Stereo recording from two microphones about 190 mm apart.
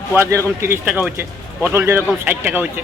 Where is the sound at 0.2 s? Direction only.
15° right (ahead or behind).